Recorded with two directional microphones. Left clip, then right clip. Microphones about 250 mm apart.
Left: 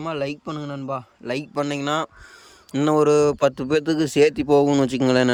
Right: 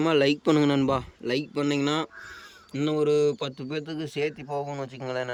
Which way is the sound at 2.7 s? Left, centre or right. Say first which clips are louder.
Left 7 dB; centre.